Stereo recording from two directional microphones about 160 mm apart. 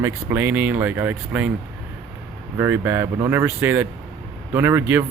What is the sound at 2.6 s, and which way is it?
Speech, 15° right (ahead or behind).